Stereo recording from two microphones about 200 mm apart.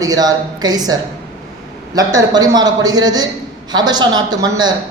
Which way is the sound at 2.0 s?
20° right (ahead or behind).